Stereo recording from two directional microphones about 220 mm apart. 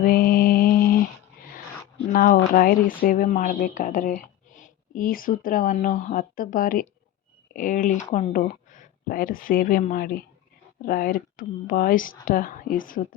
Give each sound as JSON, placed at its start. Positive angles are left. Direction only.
{"t": 0.0, "sound": "mantra", "side_deg": 40}
{"t": 2.0, "sound": "speech", "side_deg": 40}